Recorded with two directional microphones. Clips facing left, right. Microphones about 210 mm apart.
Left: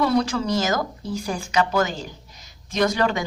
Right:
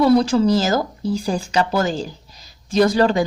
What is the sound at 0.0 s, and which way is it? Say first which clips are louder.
Speech: right 7 dB; 30° right (ahead or behind).